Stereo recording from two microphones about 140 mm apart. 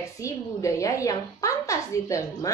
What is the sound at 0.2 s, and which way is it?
A woman's voice, 20° left (ahead or behind).